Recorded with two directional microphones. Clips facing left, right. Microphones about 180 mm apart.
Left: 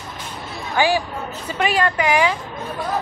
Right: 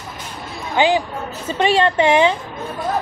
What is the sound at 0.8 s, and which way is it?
A woman's voice, 20° right (ahead or behind).